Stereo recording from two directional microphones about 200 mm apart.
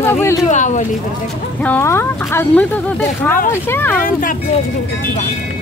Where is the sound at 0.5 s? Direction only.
35° left (ahead or behind).